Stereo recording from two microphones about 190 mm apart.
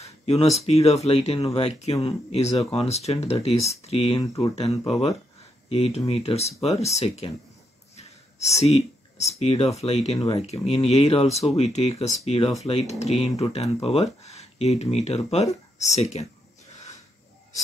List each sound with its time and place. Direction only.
0.0 s speech: 35° left (ahead or behind)